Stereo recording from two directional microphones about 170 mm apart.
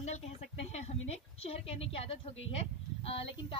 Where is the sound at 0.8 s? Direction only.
40° left (ahead or behind).